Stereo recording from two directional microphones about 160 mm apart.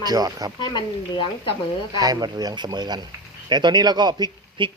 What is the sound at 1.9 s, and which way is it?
Speech, 25° right (ahead or behind).